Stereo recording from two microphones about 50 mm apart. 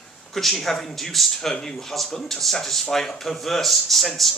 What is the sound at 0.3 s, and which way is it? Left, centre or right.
Speech, centre.